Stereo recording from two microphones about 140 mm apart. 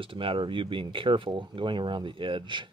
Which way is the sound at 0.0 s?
40° right (ahead or behind).